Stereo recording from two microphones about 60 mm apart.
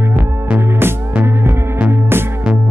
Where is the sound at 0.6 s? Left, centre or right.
Right.